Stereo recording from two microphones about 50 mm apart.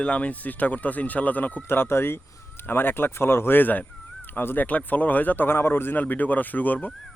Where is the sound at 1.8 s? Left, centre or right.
Left.